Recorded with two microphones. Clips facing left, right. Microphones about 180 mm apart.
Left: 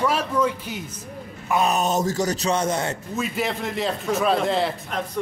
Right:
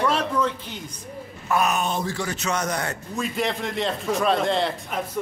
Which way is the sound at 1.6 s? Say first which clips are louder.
Left 3 dB; 40° left (ahead or behind).